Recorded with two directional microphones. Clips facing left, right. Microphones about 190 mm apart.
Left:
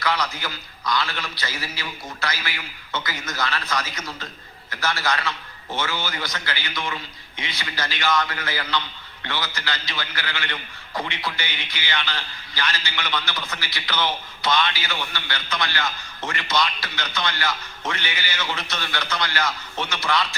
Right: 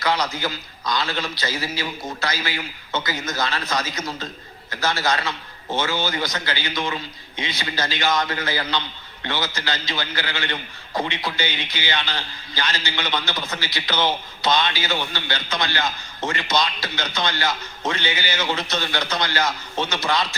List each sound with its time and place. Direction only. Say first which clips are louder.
0.2 s a man's voice: right 3 dB; 20° right (ahead or behind)